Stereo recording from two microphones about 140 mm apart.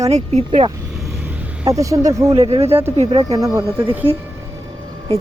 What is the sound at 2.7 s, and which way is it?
Speech, 15° right (ahead or behind).